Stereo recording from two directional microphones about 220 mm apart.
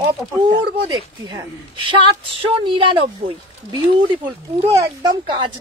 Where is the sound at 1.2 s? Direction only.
20° right (ahead or behind).